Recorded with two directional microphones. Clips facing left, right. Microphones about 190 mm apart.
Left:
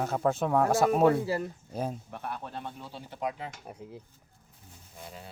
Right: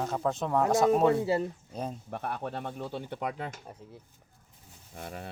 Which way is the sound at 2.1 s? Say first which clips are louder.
Right 3 dB; 60° right (ahead or behind).